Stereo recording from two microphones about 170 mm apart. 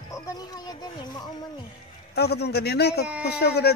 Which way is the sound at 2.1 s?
70° left (ahead or behind).